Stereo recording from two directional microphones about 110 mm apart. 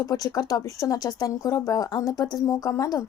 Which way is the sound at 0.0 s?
35° left (ahead or behind).